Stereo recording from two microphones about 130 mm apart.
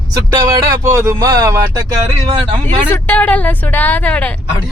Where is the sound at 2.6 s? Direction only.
15° left (ahead or behind).